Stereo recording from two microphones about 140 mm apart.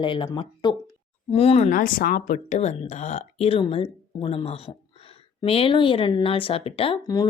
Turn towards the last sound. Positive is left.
turn(degrees=25)  # may be behind; listen again after turning